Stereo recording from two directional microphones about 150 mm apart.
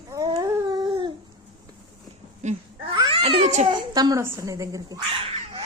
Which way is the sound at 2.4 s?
50° right (ahead or behind).